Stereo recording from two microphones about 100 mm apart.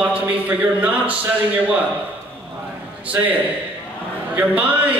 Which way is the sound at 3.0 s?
15° right (ahead or behind).